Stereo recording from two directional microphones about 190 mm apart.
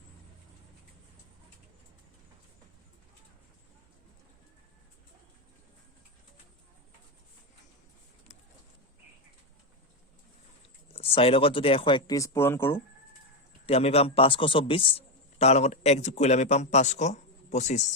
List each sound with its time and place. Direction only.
10.9 s speech: 30° left (ahead or behind); by 12.8 s 10° left (ahead or behind)
13.7 s speech: 30° left (ahead or behind)